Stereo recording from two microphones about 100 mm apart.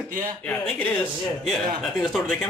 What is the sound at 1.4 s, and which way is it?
Speech, 5° left (ahead or behind).